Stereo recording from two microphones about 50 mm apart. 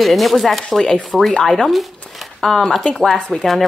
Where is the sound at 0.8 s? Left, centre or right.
Centre.